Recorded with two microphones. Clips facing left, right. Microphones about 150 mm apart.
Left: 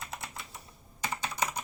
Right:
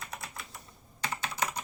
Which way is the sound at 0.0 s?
25° left (ahead or behind).